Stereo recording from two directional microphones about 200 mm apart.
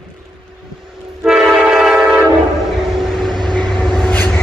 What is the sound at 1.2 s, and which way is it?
Train, 5° right (ahead or behind).